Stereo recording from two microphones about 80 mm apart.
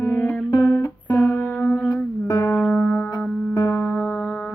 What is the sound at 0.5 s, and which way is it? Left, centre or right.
Music, left.